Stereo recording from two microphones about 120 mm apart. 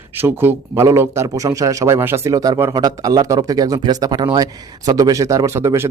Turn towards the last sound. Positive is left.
turn(degrees=-25)  # may be behind; listen again after turning